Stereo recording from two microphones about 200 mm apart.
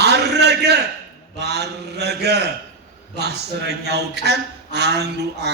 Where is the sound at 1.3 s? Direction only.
55° right (ahead or behind).